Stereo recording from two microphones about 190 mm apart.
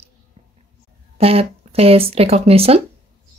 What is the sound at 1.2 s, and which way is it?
Speech, 30° right (ahead or behind).